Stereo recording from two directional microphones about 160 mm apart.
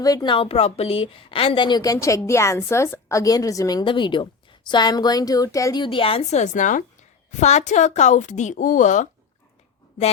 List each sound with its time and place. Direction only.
0.0 s a woman's voice: 25° left (ahead or behind); by 9.0 s 50° left (ahead or behind)